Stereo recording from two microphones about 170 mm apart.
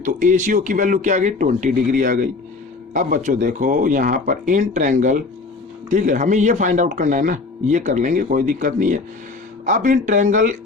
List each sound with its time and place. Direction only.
0.0 s speech: 50° right (ahead or behind)